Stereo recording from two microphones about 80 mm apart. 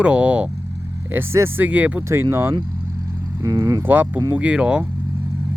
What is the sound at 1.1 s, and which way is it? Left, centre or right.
Speech, right.